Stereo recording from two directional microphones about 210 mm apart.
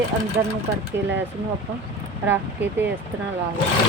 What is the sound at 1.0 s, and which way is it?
Speech, 55° right (ahead or behind).